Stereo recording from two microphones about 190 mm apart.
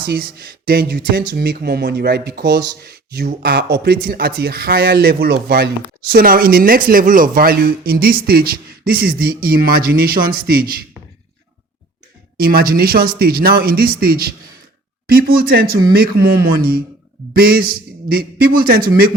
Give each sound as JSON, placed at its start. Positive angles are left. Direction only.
{"t": 0.0, "sound": "speech", "side_deg": -55}
{"t": 12.4, "sound": "speech", "side_deg": -50}